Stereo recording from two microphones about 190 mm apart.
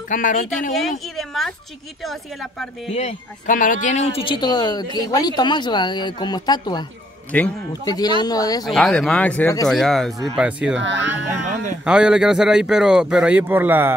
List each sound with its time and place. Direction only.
0.1 s speech: 45° left (ahead or behind)
0.7 s a woman's voice: centre (ahead or behind)
2.9 s speech: 35° left (ahead or behind)
7.3 s a man's voice: 5° left (ahead or behind)
7.8 s speech: 20° left (ahead or behind)
8.6 s speech: 5° left (ahead or behind)
10.8 s speech: 75° right (ahead or behind)
11.8 s speech: 5° right (ahead or behind)